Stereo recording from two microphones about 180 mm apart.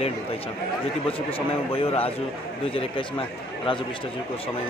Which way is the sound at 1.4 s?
30° left (ahead or behind).